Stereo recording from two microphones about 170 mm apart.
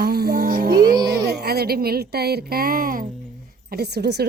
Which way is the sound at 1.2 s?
70° right (ahead or behind).